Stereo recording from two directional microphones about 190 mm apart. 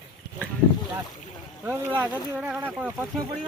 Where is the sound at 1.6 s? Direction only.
10° right (ahead or behind).